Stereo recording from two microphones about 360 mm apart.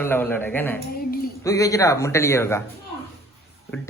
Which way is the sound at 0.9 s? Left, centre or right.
Left.